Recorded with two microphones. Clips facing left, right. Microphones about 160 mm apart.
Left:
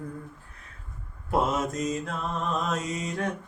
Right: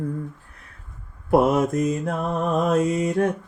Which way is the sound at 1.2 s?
60° right (ahead or behind).